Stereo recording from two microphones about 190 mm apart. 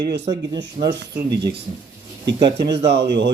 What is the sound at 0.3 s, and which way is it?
Speech, 20° right (ahead or behind).